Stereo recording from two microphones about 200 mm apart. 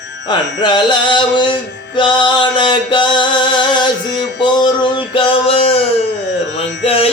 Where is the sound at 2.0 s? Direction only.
25° left (ahead or behind).